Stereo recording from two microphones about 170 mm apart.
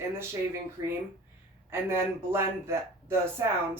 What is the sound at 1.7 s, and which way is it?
Speech, 15° right (ahead or behind).